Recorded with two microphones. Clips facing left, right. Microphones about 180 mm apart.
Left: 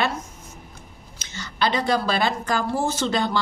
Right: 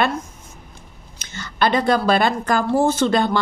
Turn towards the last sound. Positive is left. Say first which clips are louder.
# right 6 dB
turn(degrees=-55)  # may be behind; listen again after turning